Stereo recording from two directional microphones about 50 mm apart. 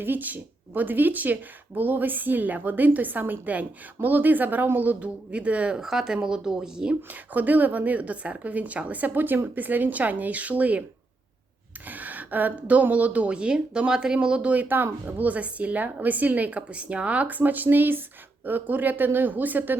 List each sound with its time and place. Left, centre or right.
0.0 s speech: right
5.8 s speech: centre
7.1 s speech: right
11.9 s speech: right; by 14.5 s centre
14.5 s speech: right